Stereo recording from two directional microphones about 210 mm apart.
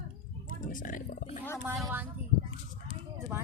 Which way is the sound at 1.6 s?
10° right (ahead or behind).